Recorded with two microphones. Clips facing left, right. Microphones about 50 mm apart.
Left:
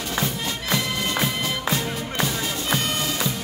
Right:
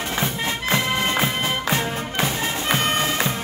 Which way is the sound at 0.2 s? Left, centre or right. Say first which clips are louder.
Right 3 dB; right.